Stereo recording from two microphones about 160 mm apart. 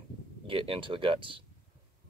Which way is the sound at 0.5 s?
35° right (ahead or behind).